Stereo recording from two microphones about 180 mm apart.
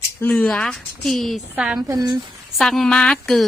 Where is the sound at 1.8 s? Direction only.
20° right (ahead or behind).